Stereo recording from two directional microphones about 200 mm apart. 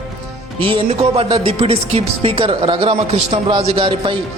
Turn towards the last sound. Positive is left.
turn(degrees=-25)  # may be behind; listen again after turning